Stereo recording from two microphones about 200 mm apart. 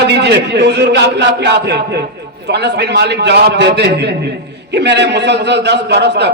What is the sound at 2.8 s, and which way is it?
A man's voice, 60° right (ahead or behind).